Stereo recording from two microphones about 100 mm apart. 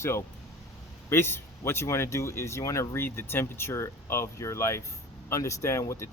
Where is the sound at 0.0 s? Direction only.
25° left (ahead or behind).